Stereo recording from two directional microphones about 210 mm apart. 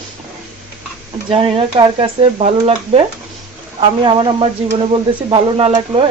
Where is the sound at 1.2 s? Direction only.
25° right (ahead or behind).